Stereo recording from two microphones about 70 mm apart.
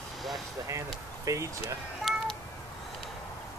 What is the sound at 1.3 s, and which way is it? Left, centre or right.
Speech, right.